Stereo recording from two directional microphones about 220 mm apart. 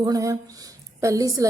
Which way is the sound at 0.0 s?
15° right (ahead or behind).